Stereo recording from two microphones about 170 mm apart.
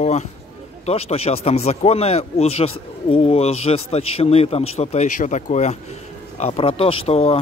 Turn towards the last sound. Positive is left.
turn(degrees=35)  # may be behind; listen again after turning